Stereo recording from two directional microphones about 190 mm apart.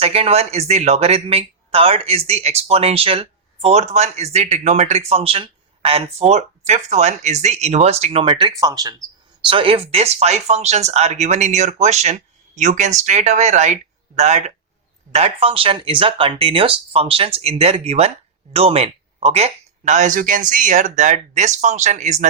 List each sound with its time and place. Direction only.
0.0 s speech: 30° right (ahead or behind)